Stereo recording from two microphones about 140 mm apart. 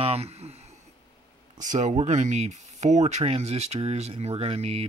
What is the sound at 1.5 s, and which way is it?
Speech, 60° right (ahead or behind).